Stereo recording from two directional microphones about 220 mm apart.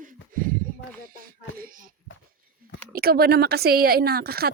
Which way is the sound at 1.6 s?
40° right (ahead or behind).